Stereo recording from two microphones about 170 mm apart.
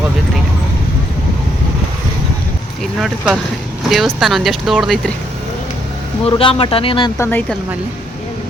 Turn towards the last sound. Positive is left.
turn(degrees=10)  # may be behind; listen again after turning